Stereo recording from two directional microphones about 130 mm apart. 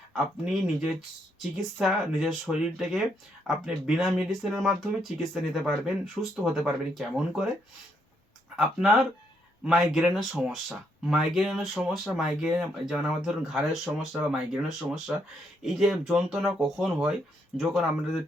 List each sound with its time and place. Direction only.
0.1 s speech: centre (ahead or behind)
8.5 s speech: centre (ahead or behind)